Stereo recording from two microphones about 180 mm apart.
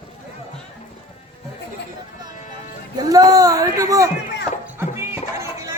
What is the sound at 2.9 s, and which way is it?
A man's voice, 20° right (ahead or behind).